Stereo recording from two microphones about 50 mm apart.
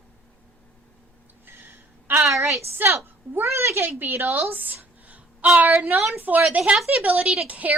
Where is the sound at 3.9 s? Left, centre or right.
Right.